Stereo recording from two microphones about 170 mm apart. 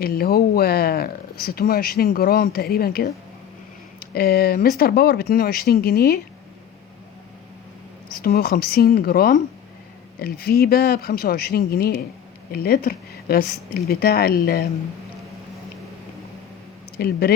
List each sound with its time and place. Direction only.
0.0 s speech: 65° left (ahead or behind)
8.2 s speech: 70° left (ahead or behind)
17.0 s speech: 65° left (ahead or behind)